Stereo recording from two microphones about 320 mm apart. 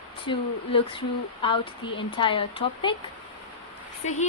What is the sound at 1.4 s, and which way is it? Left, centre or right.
A woman's voice, centre.